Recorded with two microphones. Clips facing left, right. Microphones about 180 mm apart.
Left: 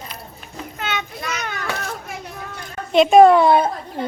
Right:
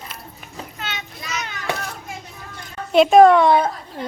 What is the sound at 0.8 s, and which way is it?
Children playing, 50° left (ahead or behind).